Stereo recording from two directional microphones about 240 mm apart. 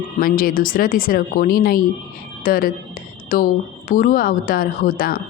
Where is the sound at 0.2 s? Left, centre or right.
Left.